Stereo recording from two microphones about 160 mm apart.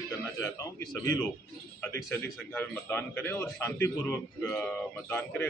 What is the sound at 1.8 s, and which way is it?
A man's voice, 10° left (ahead or behind).